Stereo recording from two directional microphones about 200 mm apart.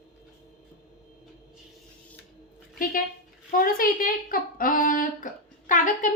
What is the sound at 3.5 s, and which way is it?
A woman's voice, 45° left (ahead or behind).